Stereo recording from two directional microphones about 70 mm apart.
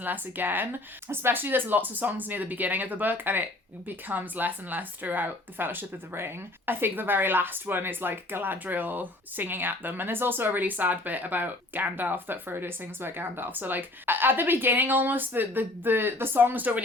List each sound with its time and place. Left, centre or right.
0.0 s speech: right